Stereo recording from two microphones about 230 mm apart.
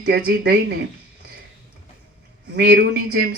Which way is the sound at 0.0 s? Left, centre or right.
Right.